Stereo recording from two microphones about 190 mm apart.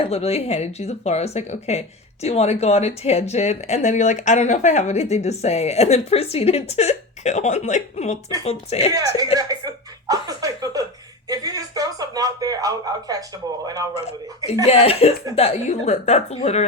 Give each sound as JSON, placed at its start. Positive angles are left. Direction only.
{"t": 0.0, "sound": "speech", "side_deg": 30}
{"t": 8.9, "sound": "speech", "side_deg": -20}
{"t": 13.9, "sound": "speech", "side_deg": 35}